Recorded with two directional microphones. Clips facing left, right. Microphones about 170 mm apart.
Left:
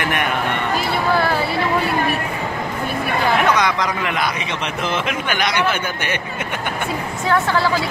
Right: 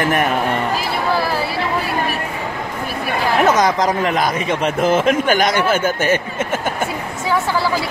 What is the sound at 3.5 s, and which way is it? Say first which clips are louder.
A man's voice: right 4 dB; 40° right (ahead or behind).